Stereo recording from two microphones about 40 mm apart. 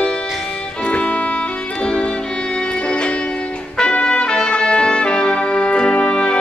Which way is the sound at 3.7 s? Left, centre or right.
Left.